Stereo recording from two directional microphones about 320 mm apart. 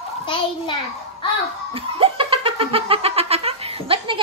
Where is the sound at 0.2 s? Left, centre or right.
Centre.